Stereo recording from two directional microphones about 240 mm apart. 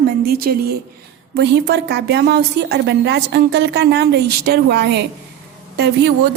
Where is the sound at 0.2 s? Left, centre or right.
Right.